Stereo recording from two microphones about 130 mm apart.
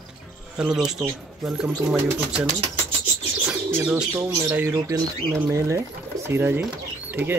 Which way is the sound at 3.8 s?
15° right (ahead or behind).